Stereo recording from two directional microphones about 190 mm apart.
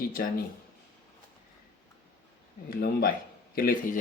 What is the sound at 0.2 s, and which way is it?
Speech, 55° left (ahead or behind).